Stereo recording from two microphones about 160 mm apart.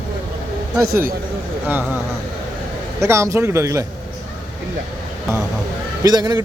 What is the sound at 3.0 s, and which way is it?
Speech, 15° right (ahead or behind).